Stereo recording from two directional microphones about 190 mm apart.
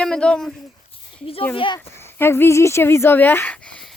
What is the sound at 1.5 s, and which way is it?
Speech, 25° left (ahead or behind).